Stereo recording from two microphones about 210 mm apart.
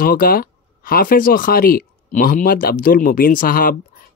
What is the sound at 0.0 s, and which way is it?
Speech, 40° left (ahead or behind).